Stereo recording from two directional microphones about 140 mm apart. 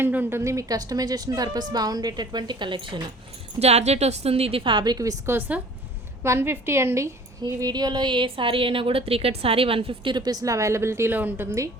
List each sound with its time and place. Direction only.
0.0 s a woman's voice: 15° right (ahead or behind); by 3.0 s 35° right (ahead or behind)
3.6 s a woman's voice: 50° right (ahead or behind); by 11.7 s 20° right (ahead or behind)